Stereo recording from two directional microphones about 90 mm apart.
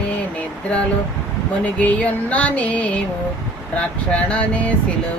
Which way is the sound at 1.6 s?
15° left (ahead or behind).